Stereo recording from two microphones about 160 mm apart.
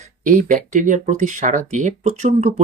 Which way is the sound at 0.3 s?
55° right (ahead or behind).